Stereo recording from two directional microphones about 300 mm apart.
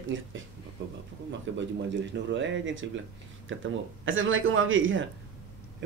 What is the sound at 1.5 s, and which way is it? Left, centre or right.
Speech, right.